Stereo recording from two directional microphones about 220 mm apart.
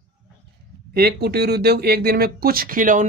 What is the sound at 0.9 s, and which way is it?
Speech, 45° right (ahead or behind).